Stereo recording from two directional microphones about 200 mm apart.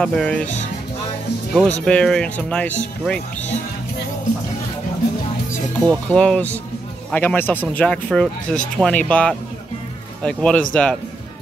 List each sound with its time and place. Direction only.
0.0 s speech: 5° left (ahead or behind)
1.5 s speech: 5° left (ahead or behind)
5.9 s speech: 5° left (ahead or behind)